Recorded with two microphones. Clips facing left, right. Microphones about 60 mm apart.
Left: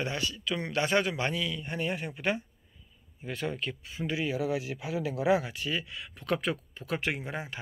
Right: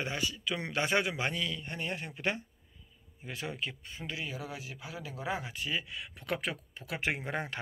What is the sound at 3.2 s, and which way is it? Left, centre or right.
Speech, centre.